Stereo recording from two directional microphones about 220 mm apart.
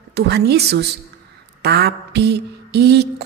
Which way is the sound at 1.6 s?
50° right (ahead or behind).